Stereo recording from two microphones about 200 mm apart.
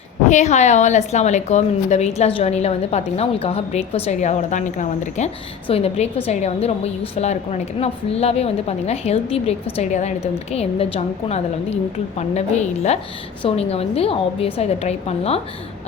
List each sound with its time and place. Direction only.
0.3 s a woman's voice: 35° left (ahead or behind)